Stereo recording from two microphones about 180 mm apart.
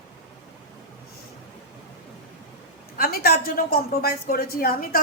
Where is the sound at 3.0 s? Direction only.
60° left (ahead or behind).